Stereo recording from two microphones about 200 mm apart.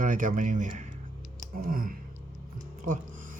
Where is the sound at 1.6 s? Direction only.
45° right (ahead or behind).